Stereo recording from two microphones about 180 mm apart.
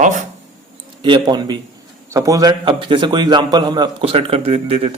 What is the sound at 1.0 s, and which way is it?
A man's voice, 25° right (ahead or behind).